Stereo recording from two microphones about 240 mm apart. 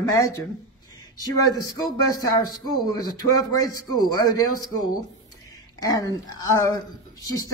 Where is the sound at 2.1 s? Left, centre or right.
Centre.